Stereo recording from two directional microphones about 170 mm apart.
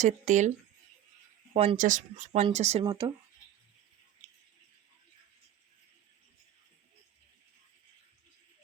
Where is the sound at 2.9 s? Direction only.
25° right (ahead or behind).